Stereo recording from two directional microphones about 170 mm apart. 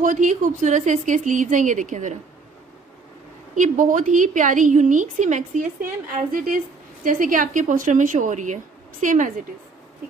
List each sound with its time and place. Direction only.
0.0 s a woman's voice: 50° right (ahead or behind)
3.5 s a woman's voice: 50° right (ahead or behind)